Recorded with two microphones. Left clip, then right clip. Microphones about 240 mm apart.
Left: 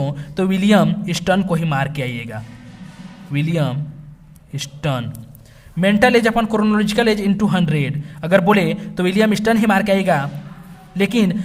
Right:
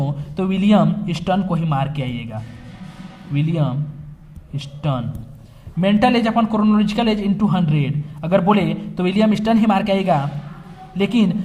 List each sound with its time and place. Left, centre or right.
0.0 s a man's voice: left
3.3 s a man's voice: left